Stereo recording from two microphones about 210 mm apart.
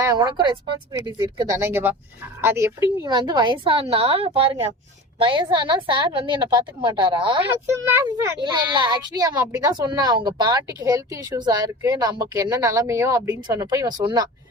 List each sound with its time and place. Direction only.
0.0 s a woman's voice: 20° right (ahead or behind)
7.7 s a child's voice: 10° right (ahead or behind)